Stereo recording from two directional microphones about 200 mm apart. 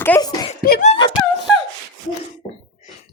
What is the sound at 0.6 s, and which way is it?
Speech, 50° left (ahead or behind).